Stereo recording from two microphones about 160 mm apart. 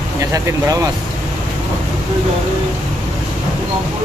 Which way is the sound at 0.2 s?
20° right (ahead or behind).